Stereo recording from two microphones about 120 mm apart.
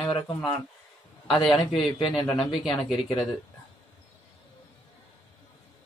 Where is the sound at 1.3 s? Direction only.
Centre (ahead or behind).